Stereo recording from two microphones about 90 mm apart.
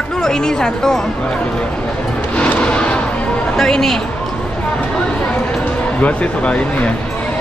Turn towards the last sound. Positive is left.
turn(degrees=15)  # may be behind; listen again after turning